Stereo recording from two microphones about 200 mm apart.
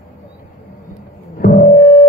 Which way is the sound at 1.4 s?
45° left (ahead or behind).